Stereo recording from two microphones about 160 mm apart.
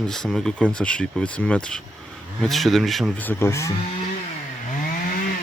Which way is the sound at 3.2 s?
15° left (ahead or behind).